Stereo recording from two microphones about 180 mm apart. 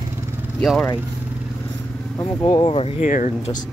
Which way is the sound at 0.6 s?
5° left (ahead or behind).